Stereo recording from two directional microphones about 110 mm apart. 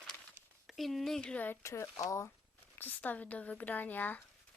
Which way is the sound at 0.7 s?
Centre (ahead or behind).